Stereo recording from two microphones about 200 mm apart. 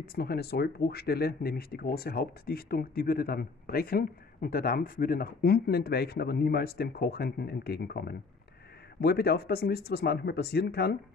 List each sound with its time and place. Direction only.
0.0 s speech: 50° left (ahead or behind)